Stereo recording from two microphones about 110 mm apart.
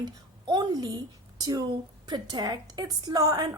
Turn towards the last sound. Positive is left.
turn(degrees=-35)  # may be behind; listen again after turning